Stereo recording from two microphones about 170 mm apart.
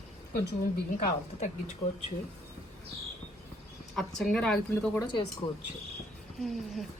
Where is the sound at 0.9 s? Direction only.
40° left (ahead or behind).